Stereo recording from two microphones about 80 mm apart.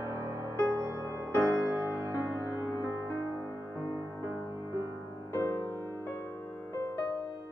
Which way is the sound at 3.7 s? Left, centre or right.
Right.